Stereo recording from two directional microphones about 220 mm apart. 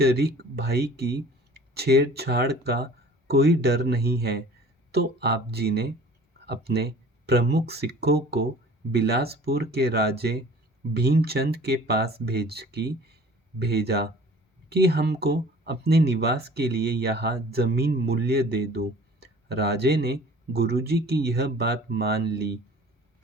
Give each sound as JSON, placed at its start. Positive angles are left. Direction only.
{"t": 0.0, "sound": "speech", "side_deg": -45}